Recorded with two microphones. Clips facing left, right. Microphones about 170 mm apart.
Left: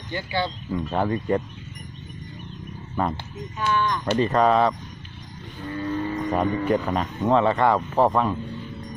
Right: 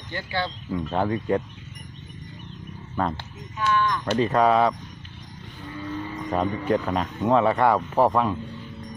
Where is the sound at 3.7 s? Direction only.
30° left (ahead or behind).